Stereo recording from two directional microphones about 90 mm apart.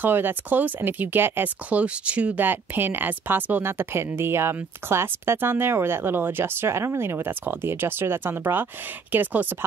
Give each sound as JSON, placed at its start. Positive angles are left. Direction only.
{"t": 0.0, "sound": "speech", "side_deg": -20}